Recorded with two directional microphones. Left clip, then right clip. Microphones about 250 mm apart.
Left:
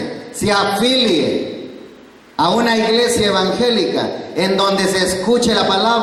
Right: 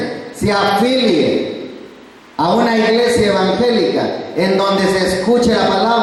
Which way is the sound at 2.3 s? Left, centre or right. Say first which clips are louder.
Right 1 dB; centre.